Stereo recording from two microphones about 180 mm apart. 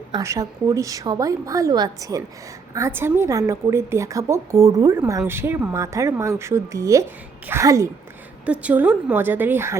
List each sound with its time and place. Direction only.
0.1 s a woman's voice: 15° right (ahead or behind)